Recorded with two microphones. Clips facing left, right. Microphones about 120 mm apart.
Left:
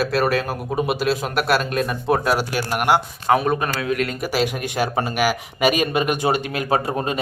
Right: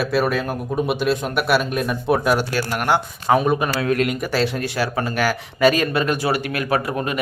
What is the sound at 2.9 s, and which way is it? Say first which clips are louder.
Speech: even; centre (ahead or behind).